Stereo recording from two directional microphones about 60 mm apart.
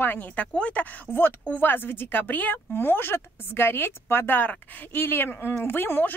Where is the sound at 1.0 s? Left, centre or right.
Left.